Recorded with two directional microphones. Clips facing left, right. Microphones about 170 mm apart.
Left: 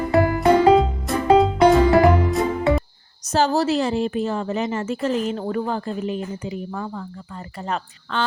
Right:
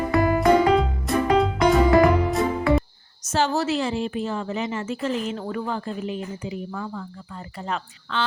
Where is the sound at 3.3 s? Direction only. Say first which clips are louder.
Left 4 dB; 35° left (ahead or behind).